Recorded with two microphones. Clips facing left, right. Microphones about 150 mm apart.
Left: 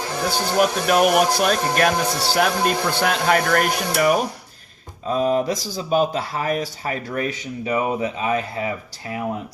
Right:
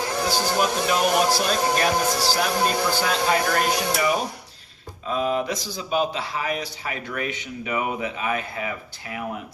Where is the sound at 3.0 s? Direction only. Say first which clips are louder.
Left 6 dB; 65° left (ahead or behind).